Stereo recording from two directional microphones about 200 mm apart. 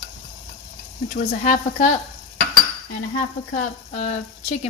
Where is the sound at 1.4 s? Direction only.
40° left (ahead or behind).